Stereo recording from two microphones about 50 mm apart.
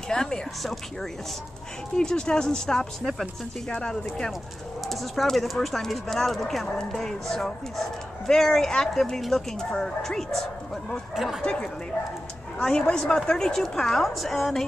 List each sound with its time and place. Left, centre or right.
0.1 s a sound: centre
2.0 s speech: centre
4.8 s speech: centre
11.1 s speech: centre
11.4 s speech: centre